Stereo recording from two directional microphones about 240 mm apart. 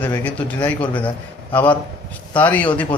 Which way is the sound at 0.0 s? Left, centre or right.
Centre.